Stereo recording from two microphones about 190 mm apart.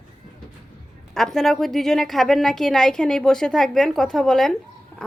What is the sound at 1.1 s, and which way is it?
A woman's voice, centre (ahead or behind).